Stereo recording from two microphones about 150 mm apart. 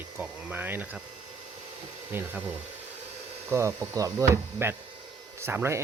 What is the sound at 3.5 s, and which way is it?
Speech, 20° right (ahead or behind).